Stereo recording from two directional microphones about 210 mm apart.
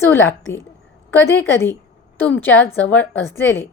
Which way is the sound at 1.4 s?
10° left (ahead or behind).